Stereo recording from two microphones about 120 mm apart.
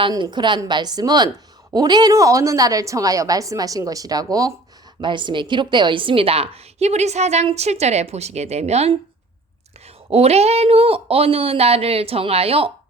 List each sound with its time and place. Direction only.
0.1 s a woman's voice: 35° right (ahead or behind)
4.9 s a woman's voice: 40° right (ahead or behind); by 9.0 s 60° right (ahead or behind)
10.1 s a woman's voice: 60° right (ahead or behind)